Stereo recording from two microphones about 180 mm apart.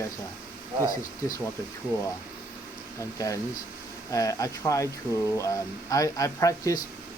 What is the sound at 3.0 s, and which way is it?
Speech, 20° left (ahead or behind).